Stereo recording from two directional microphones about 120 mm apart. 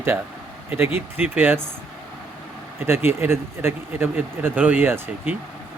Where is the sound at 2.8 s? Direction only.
20° right (ahead or behind).